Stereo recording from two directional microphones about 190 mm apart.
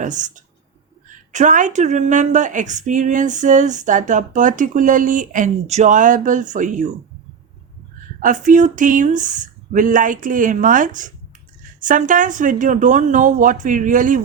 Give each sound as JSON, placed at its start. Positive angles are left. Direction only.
{"t": 0.0, "sound": "a woman's voice", "side_deg": -40}
{"t": 8.2, "sound": "speech", "side_deg": -40}